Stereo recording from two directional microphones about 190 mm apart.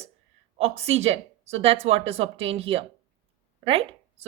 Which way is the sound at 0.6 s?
35° right (ahead or behind).